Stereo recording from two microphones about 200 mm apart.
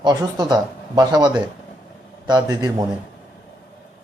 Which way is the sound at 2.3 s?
20° right (ahead or behind).